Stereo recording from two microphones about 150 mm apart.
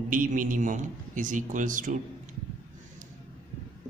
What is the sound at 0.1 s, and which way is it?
A man's voice, 60° right (ahead or behind).